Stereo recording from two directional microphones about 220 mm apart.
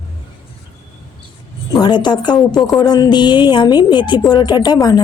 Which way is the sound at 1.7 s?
20° left (ahead or behind).